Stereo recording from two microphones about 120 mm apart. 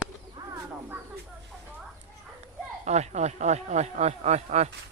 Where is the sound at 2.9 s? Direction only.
70° right (ahead or behind).